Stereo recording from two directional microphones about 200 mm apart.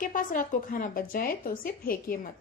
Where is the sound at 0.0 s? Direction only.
40° left (ahead or behind).